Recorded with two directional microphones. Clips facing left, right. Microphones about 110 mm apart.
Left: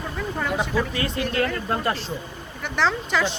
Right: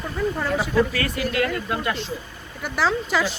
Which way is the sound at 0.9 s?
25° left (ahead or behind).